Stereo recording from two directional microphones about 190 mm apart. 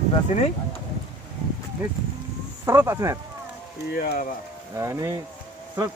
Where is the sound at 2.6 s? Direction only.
15° right (ahead or behind).